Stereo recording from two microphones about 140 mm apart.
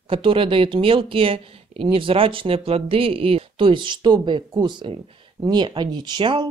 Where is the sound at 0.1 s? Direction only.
40° right (ahead or behind).